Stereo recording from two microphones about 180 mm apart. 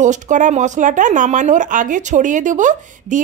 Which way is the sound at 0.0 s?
45° right (ahead or behind).